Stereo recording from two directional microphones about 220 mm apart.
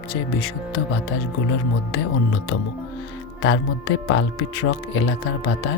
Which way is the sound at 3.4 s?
65° left (ahead or behind).